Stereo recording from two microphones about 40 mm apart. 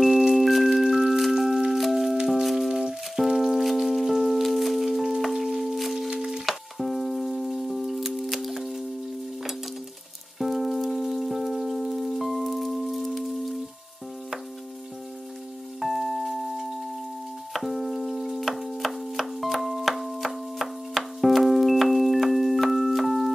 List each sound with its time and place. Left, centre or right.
0.3 s glockenspiel: centre
1.7 s music: centre
6.0 s a sound: centre
6.4 s music: centre
10.4 s rain on surface: centre
15.8 s music: centre